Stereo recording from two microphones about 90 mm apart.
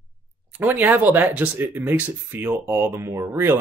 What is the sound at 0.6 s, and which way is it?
Speech, 20° right (ahead or behind).